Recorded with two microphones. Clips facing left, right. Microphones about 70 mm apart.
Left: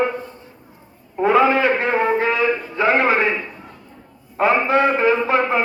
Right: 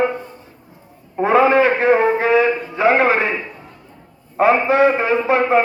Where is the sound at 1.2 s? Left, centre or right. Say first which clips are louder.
Right 2 dB; right.